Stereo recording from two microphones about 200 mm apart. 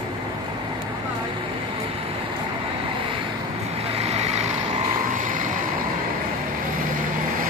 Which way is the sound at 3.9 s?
30° right (ahead or behind).